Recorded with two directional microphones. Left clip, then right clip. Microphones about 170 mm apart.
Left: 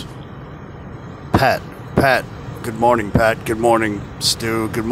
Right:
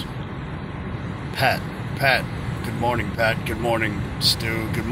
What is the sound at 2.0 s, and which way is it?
Speech, 40° left (ahead or behind).